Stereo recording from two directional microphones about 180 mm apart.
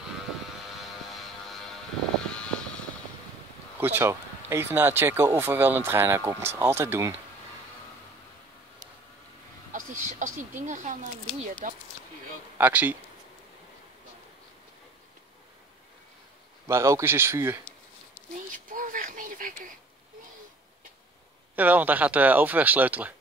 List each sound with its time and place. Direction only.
0.7 s vehicle: centre (ahead or behind)
3.8 s speech: 15° right (ahead or behind)
9.7 s speech: 45° right (ahead or behind)
12.5 s speech: 10° right (ahead or behind)
16.6 s speech: 15° right (ahead or behind)
18.5 s a sound: 45° right (ahead or behind)
21.5 s speech: 10° right (ahead or behind)